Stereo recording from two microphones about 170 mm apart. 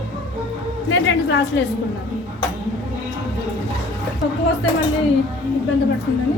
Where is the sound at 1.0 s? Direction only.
90° left.